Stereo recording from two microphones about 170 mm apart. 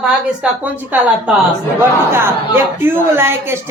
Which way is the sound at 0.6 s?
10° right (ahead or behind).